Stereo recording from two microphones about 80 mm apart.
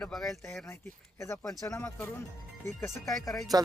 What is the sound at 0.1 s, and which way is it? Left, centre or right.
Speech, centre.